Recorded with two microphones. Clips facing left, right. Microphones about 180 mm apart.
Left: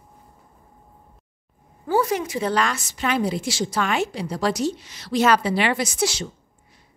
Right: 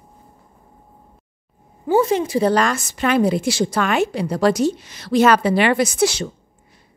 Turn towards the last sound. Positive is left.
turn(degrees=-60)  # may be behind; listen again after turning